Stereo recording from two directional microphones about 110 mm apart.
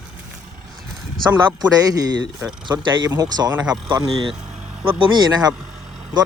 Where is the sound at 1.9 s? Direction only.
35° right (ahead or behind).